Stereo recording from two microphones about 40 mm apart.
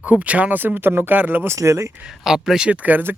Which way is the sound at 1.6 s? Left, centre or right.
Right.